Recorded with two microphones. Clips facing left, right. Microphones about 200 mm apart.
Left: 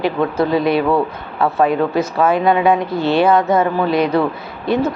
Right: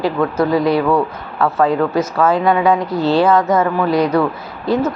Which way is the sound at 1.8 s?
25° left (ahead or behind).